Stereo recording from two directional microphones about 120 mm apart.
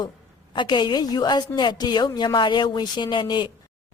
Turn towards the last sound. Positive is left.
turn(degrees=40)  # may be behind; listen again after turning